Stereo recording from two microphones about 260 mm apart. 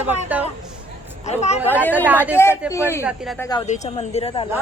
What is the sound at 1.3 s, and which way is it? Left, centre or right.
Speech, left.